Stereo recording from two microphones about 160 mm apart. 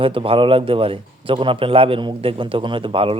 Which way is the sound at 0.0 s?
35° right (ahead or behind).